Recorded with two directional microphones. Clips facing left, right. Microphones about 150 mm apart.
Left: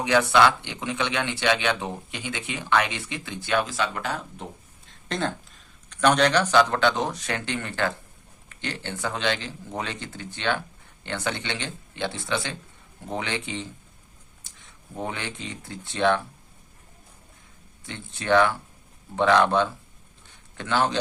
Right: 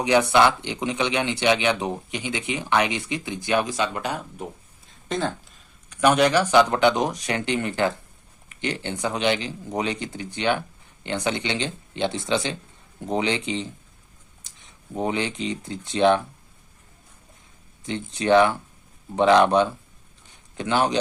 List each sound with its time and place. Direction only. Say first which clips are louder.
0.0 s speech: right 1 dB; 15° right (ahead or behind)
5.0 s speech: right 2 dB; centre (ahead or behind); by 13.7 s 20° right (ahead or behind)
14.9 s speech: right 7 dB; 20° right (ahead or behind)
17.8 s speech: right 5 dB; 20° right (ahead or behind)